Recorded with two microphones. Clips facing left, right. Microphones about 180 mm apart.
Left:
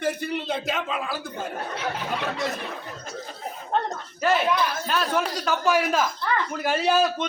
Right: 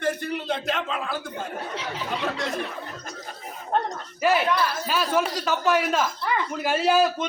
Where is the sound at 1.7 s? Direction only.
55° left (ahead or behind).